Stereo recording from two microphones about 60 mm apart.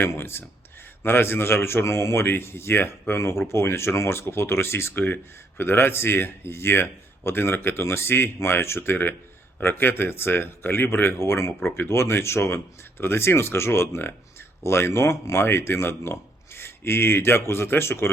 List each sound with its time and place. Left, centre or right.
0.0 s speech: left